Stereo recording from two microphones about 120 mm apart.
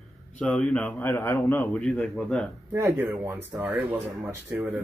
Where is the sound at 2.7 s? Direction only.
20° right (ahead or behind).